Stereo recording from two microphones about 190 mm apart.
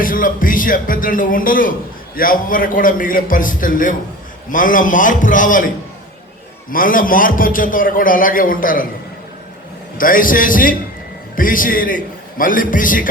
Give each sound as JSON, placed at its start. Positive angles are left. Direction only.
{"t": 0.0, "sound": "a man's voice", "side_deg": 45}
{"t": 6.7, "sound": "a man's voice", "side_deg": 45}
{"t": 10.0, "sound": "a man's voice", "side_deg": 45}